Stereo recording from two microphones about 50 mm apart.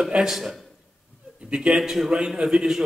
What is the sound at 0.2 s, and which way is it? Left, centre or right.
Speech, centre.